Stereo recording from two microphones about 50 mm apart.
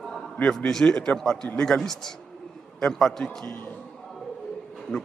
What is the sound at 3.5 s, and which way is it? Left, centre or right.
Speech, left.